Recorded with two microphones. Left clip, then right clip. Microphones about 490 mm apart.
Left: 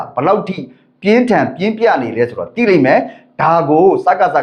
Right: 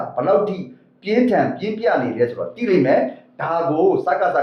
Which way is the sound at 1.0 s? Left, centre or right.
Left.